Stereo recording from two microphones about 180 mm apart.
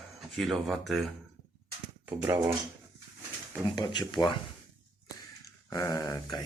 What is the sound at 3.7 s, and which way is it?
Speech, 25° left (ahead or behind).